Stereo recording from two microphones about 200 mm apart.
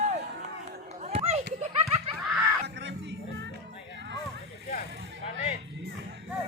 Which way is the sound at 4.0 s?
60° right (ahead or behind).